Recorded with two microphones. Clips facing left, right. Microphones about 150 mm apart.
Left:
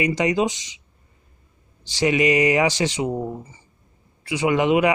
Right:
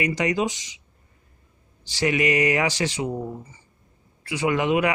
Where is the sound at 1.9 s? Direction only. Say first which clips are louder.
Left 3 dB; 20° left (ahead or behind).